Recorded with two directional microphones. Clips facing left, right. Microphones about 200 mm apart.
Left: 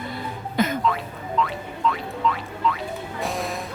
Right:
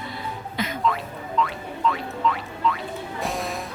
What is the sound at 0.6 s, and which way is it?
Music, 50° left (ahead or behind).